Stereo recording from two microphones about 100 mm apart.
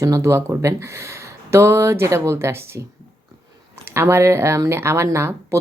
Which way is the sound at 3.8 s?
25° right (ahead or behind).